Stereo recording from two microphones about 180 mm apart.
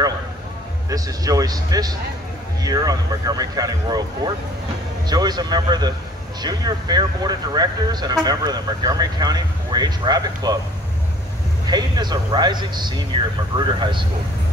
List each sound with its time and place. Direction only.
0.8 s speech: 20° right (ahead or behind)
11.6 s speech: 25° right (ahead or behind)